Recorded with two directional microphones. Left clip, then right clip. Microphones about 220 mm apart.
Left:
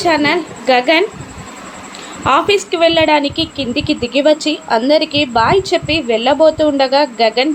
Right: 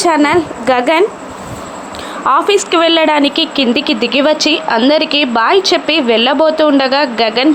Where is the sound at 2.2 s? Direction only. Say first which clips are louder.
Right 2 dB; 20° right (ahead or behind).